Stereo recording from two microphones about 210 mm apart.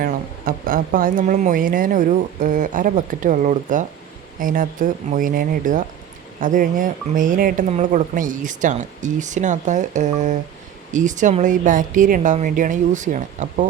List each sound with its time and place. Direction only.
0.0 s speech: 40° right (ahead or behind)